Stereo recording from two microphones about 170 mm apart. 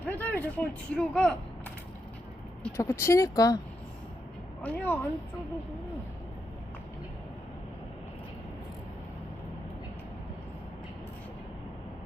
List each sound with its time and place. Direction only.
0.0 s speech: 10° left (ahead or behind)
2.7 s speech: 15° left (ahead or behind)
4.6 s speech: 10° left (ahead or behind)